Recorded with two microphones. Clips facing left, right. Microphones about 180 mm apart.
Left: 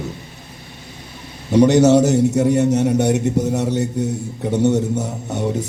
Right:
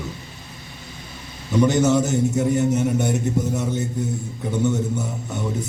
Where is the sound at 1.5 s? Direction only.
75° left (ahead or behind).